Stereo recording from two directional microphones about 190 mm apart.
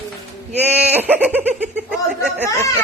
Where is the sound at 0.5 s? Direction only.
10° right (ahead or behind).